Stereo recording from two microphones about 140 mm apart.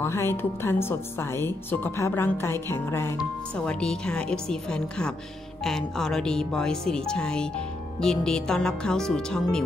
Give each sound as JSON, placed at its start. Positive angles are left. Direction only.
{"t": 0.0, "sound": "speech", "side_deg": 20}
{"t": 3.5, "sound": "speech", "side_deg": 5}